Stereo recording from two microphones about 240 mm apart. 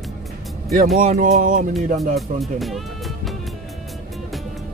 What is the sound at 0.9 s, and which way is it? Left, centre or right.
Music, right.